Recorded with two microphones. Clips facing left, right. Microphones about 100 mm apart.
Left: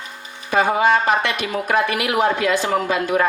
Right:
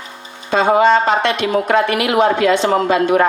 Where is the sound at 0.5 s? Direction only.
75° right (ahead or behind).